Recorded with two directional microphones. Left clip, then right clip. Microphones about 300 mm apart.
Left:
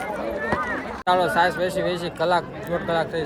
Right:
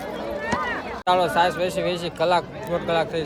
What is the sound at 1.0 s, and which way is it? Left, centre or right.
A man's voice, centre.